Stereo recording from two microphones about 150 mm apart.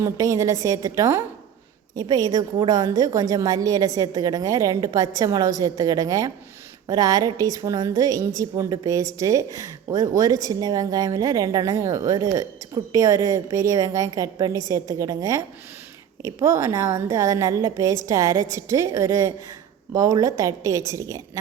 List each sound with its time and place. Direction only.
0.0 s speech: 20° right (ahead or behind)